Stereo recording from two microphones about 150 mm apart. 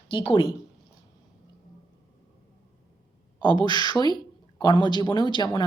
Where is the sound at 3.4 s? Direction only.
30° left (ahead or behind).